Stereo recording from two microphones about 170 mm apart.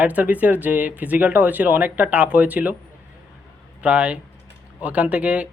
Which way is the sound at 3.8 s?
5° right (ahead or behind).